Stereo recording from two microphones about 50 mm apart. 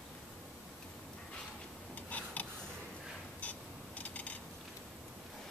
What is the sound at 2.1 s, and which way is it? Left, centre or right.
Tick-tock, left.